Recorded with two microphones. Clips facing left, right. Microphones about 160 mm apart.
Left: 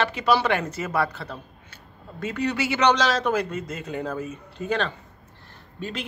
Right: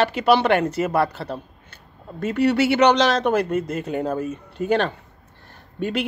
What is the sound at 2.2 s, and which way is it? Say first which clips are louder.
A man's voice: right 7 dB; 65° right (ahead or behind).